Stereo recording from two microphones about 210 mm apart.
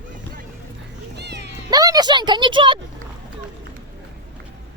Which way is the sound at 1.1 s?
55° right (ahead or behind).